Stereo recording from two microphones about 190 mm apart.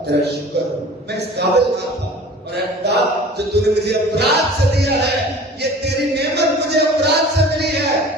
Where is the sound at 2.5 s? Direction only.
60° right (ahead or behind).